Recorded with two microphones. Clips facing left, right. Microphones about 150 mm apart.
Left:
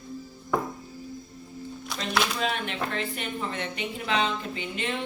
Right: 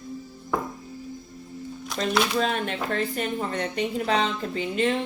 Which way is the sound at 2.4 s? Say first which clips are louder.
Right 4 dB; 40° right (ahead or behind).